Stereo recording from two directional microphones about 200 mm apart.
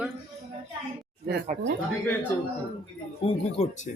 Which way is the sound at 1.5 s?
40° right (ahead or behind).